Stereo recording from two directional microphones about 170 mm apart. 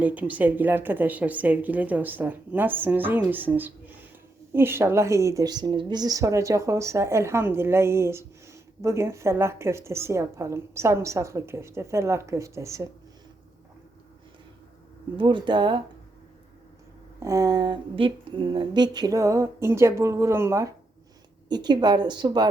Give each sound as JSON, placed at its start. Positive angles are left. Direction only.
{"t": 0.0, "sound": "a woman's voice", "side_deg": -10}
{"t": 15.1, "sound": "a woman's voice", "side_deg": -30}
{"t": 17.2, "sound": "a woman's voice", "side_deg": -20}